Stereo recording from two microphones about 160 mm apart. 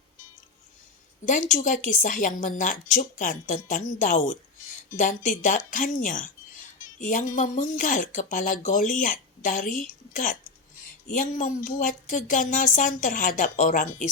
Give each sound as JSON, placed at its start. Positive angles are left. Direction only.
{"t": 1.2, "sound": "a woman's voice", "side_deg": 55}